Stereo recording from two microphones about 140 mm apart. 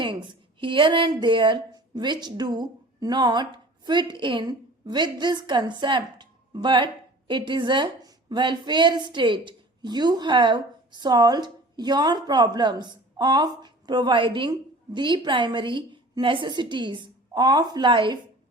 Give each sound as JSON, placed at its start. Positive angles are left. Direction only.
{"t": 0.0, "sound": "a woman's voice", "side_deg": -35}